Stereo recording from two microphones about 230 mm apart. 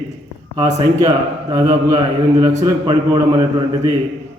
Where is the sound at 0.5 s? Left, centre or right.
Centre.